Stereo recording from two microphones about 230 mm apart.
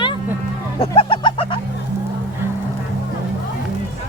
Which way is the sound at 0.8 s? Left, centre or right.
Left.